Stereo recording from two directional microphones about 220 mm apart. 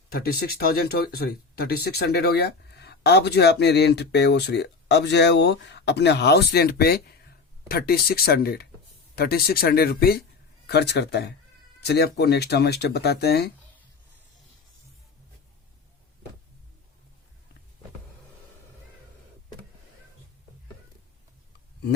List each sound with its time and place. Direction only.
0.1 s speech: 45° left (ahead or behind)